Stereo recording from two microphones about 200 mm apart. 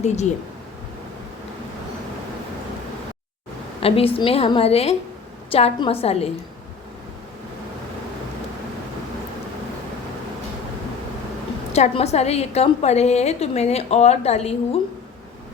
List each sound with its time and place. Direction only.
3.8 s a woman's voice: 30° left (ahead or behind)
11.7 s a woman's voice: 35° left (ahead or behind)